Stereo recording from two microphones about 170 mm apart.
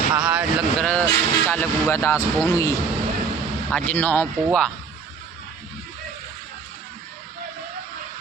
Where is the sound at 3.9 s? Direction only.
10° left (ahead or behind).